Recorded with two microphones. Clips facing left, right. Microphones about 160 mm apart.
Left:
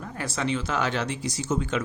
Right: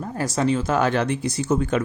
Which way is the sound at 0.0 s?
35° right (ahead or behind).